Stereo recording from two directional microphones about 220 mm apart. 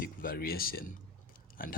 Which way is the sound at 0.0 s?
40° left (ahead or behind).